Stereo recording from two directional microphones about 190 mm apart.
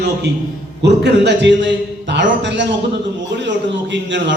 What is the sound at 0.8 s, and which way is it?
A man's voice, 65° right (ahead or behind).